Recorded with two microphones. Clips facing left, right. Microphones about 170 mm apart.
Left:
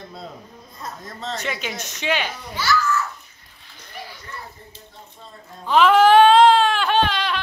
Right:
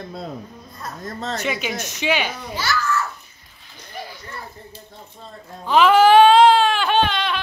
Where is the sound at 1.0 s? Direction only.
55° right (ahead or behind).